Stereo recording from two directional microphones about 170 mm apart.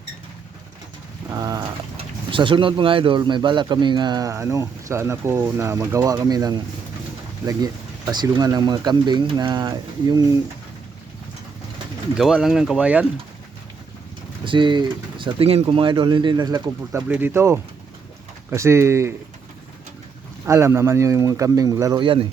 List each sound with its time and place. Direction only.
1.3 s a sound: 20° right (ahead or behind)
2.0 s speech: 30° right (ahead or behind)
8.1 s speech: 25° right (ahead or behind)
12.1 s speech: 5° right (ahead or behind)
14.4 s speech: 30° right (ahead or behind)
17.1 s speech: 10° right (ahead or behind)
20.5 s speech: 15° right (ahead or behind)